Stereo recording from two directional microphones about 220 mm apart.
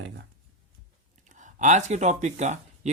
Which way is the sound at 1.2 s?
35° right (ahead or behind).